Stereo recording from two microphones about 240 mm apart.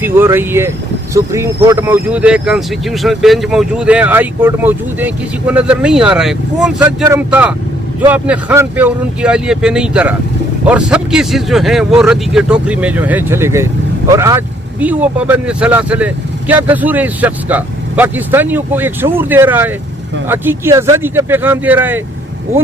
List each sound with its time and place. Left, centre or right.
0.0 s speech: centre